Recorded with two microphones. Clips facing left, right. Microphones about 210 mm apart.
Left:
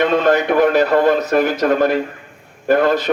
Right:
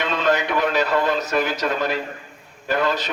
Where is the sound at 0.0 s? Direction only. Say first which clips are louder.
Left 7 dB; 55° left (ahead or behind).